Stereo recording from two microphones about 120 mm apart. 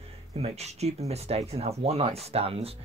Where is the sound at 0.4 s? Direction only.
65° right (ahead or behind).